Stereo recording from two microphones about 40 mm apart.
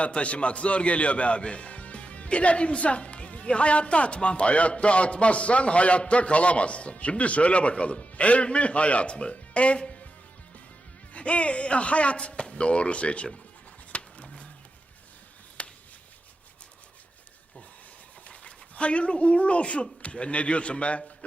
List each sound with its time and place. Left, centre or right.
0.0 s a man's voice: left
11.1 s a man's voice: left
13.9 s music: left
15.6 s a sound: left
18.3 s speech: left